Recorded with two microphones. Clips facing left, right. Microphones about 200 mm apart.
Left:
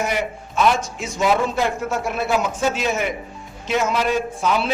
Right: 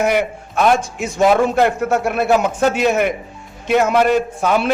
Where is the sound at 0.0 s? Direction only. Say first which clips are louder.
Right 6 dB; 60° right (ahead or behind).